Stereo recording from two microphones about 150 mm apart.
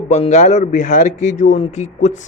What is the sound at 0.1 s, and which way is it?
Speech, 45° left (ahead or behind).